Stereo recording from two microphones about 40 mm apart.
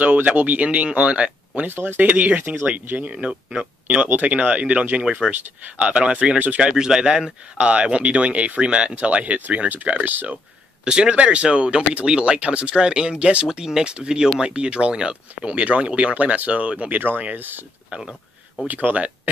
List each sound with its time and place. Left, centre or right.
0.0 s speech: right
1.7 s speech: right
2.0 s speech: right
3.2 s speech: right
4.3 s speech: right
6.6 s a man's voice: centre
7.5 s speech: right
10.8 s speech: right
13.5 s speech: centre; by 16.9 s right
16.9 s speech: right
18.7 s speech: right